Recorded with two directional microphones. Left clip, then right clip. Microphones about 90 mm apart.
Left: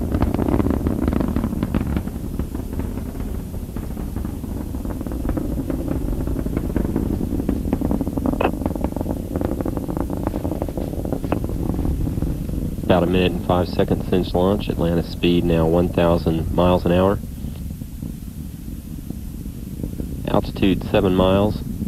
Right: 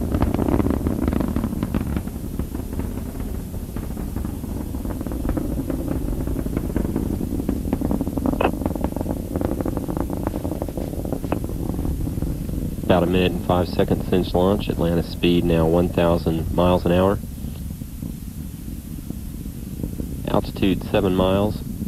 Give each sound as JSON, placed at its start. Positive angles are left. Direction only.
{"t": 0.0, "sound": "purr", "side_deg": -35}
{"t": 4.8, "sound": "a sound", "side_deg": -35}
{"t": 12.8, "sound": "speech", "side_deg": -35}
{"t": 20.2, "sound": "speech", "side_deg": -35}